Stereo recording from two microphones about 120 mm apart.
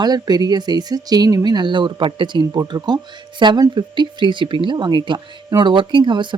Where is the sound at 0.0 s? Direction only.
35° right (ahead or behind).